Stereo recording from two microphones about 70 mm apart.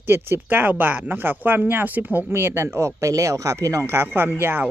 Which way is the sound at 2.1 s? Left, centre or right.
Right.